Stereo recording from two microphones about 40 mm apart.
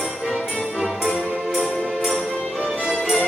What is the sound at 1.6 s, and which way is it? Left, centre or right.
Music, centre.